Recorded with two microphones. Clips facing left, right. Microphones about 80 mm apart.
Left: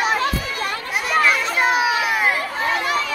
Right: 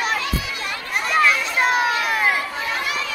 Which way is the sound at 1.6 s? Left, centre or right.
Centre.